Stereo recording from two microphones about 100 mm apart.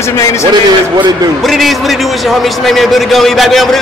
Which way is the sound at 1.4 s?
Centre (ahead or behind).